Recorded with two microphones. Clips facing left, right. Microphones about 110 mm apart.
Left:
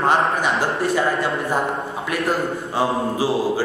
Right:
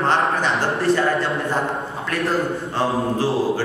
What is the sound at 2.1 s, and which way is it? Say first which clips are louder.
Speech: right 1 dB; 5° left (ahead or behind).